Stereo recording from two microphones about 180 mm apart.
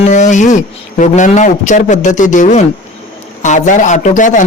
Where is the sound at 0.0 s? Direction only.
40° left (ahead or behind).